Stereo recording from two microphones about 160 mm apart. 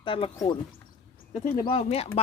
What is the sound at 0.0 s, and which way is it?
Speech, 35° left (ahead or behind).